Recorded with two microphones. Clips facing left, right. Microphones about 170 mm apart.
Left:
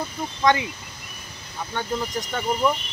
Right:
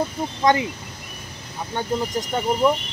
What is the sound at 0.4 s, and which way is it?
Speech, 35° right (ahead or behind).